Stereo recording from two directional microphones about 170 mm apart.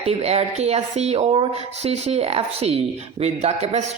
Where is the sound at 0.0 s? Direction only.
40° right (ahead or behind).